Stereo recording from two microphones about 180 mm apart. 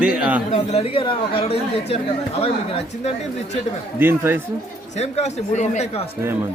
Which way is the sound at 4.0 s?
10° right (ahead or behind).